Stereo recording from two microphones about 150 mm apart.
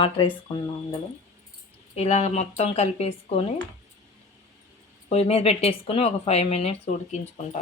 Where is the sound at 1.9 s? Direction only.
45° left (ahead or behind).